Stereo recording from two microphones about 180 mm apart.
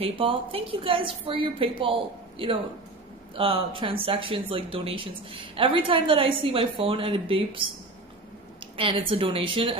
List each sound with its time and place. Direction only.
0.0 s speech: 30° right (ahead or behind)
8.7 s speech: 30° right (ahead or behind)